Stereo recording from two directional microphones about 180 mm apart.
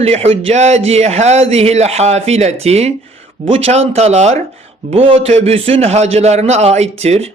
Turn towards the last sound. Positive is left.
turn(degrees=-35)  # may be behind; listen again after turning